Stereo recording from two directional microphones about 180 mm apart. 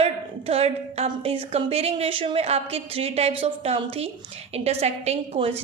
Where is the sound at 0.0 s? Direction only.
35° right (ahead or behind).